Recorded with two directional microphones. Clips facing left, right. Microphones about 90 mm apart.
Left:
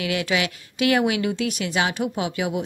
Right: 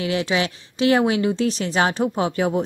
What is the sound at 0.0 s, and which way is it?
A woman's voice, 30° right (ahead or behind).